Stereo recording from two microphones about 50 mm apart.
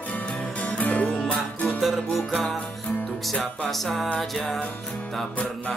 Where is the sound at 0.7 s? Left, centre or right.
Left.